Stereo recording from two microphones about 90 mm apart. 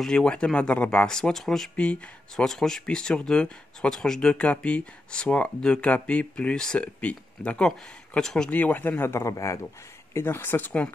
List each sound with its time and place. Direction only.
0.0 s speech: 10° left (ahead or behind)